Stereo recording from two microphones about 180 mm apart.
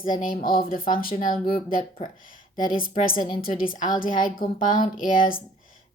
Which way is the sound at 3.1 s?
25° left (ahead or behind).